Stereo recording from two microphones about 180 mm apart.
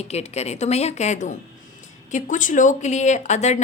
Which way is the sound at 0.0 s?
35° left (ahead or behind).